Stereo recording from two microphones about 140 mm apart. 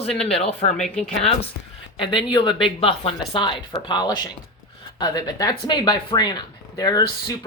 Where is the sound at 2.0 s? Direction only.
40° left (ahead or behind).